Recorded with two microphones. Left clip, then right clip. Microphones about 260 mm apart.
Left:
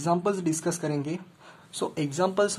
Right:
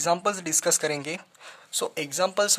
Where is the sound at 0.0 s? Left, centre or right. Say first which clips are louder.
Right 1 dB; right.